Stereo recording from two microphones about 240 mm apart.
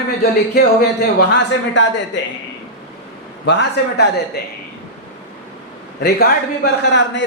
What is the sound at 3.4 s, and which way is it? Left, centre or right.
Speech, left.